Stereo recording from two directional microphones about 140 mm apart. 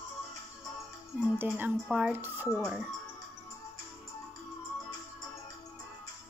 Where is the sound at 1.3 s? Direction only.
10° right (ahead or behind).